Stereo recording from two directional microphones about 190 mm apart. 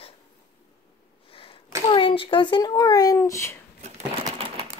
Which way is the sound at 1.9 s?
25° left (ahead or behind).